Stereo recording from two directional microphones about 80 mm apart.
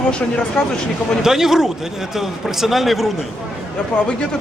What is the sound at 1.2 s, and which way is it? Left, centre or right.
A man's voice, centre.